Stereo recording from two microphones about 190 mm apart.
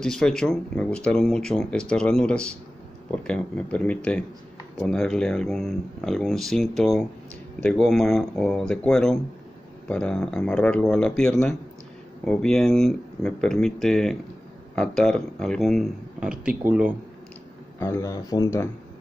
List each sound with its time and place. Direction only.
0.0 s speech: 5° left (ahead or behind)
17.7 s speech: 15° left (ahead or behind)